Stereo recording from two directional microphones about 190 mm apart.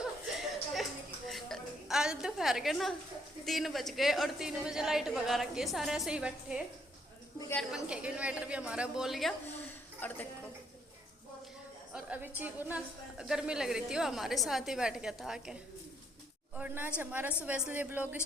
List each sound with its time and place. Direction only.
1.3 s music: centre (ahead or behind)
3.4 s a woman's voice: centre (ahead or behind)
7.3 s a woman's voice: 15° left (ahead or behind)
7.7 s a woman's voice: 5° right (ahead or behind)
11.9 s a woman's voice: 5° right (ahead or behind)
16.6 s a woman's voice: 10° right (ahead or behind)